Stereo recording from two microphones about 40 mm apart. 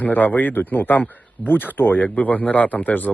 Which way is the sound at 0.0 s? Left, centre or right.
Left.